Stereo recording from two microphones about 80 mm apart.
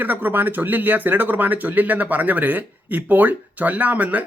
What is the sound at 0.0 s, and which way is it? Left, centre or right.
Speech, right.